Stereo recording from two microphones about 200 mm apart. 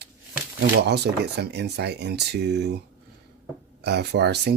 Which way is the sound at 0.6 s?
55° right (ahead or behind).